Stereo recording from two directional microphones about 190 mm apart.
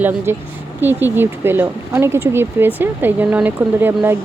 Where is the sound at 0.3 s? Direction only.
10° right (ahead or behind).